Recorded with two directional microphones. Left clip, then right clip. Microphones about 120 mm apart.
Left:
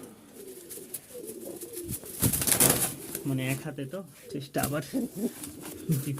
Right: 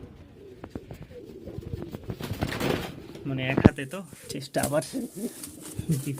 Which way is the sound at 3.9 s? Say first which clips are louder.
Right 1 dB; 25° right (ahead or behind).